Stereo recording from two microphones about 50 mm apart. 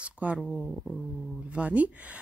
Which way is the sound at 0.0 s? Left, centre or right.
Right.